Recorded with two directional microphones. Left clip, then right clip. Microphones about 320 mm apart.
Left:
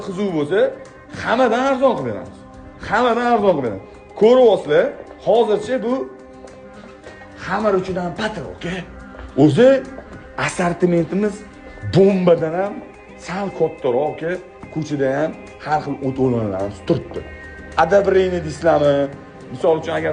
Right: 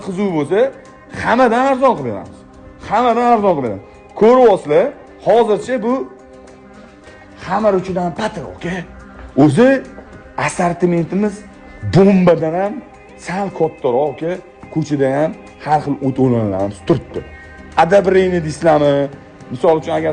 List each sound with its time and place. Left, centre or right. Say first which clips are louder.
0.0 s speech: right 3 dB; centre
7.4 s speech: right 4 dB; centre
18.0 s speech: right 3 dB; right